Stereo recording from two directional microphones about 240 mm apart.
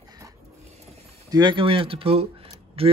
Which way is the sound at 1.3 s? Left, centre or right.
Centre.